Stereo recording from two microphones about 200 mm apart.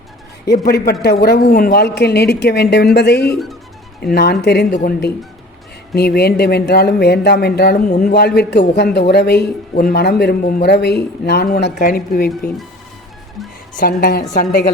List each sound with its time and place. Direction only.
0.5 s a man's voice: 55° left (ahead or behind)
7.9 s speech: 40° left (ahead or behind)
8.1 s a man's voice: 55° left (ahead or behind)
13.7 s speech: 45° left (ahead or behind)